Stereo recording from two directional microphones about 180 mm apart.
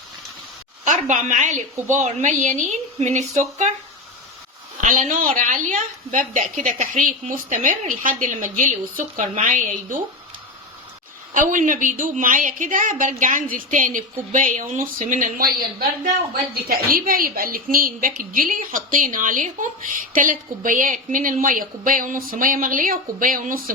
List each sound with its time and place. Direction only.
0.9 s a woman's voice: 45° right (ahead or behind)
4.8 s a woman's voice: 45° right (ahead or behind)
11.3 s a woman's voice: 45° right (ahead or behind)
16.6 s a woman's voice: 50° right (ahead or behind)